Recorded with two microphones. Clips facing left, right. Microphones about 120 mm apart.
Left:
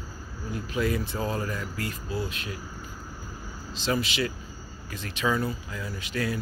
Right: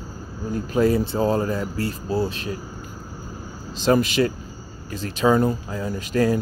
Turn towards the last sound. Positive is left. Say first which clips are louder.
# right 10 dB
turn(degrees=-40)  # may be behind; listen again after turning